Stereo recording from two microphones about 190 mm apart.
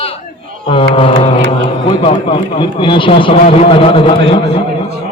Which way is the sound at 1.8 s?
30° left (ahead or behind).